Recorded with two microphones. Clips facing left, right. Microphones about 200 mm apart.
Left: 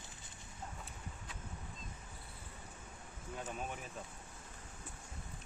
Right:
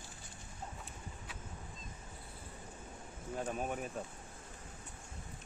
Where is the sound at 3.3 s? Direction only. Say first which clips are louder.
Right 6 dB; 45° right (ahead or behind).